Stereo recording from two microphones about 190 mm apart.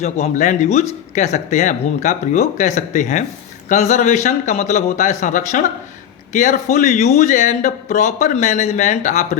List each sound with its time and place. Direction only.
0.0 s speech: 35° left (ahead or behind)